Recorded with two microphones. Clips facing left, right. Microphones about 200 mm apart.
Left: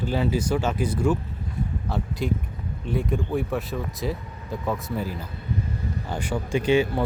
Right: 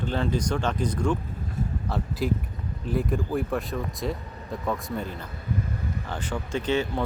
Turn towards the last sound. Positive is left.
turn(degrees=10)  # may be behind; listen again after turning